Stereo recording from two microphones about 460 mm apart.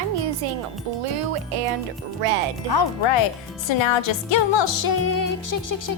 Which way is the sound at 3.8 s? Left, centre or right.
Left.